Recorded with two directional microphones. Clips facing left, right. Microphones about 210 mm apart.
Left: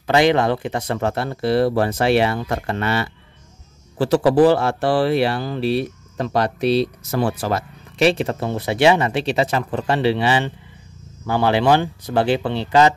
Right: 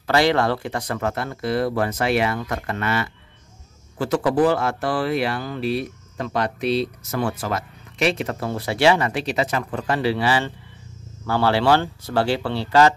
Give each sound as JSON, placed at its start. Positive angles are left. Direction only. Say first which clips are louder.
{"t": 0.0, "sound": "speech", "louder": "left 3 dB", "side_deg": 20}